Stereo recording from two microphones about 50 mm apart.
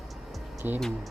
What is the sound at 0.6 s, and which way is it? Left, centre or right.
Speech, right.